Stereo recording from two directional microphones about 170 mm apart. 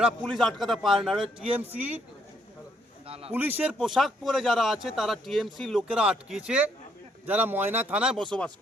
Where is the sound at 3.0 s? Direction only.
35° right (ahead or behind).